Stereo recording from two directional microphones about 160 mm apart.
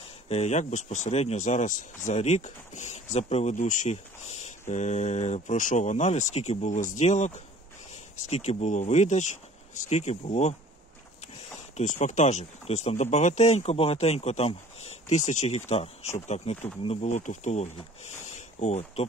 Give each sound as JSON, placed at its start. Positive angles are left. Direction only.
{"t": 0.3, "sound": "speech", "side_deg": 45}
{"t": 11.7, "sound": "speech", "side_deg": 50}